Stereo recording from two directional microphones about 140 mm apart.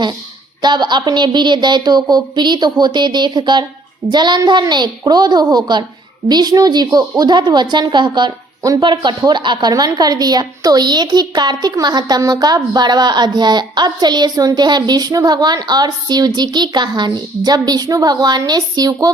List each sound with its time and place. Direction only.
0.6 s a woman's voice: 30° right (ahead or behind)